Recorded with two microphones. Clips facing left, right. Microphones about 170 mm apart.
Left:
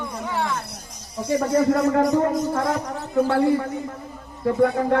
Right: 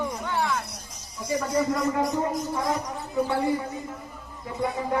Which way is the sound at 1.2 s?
60° left (ahead or behind).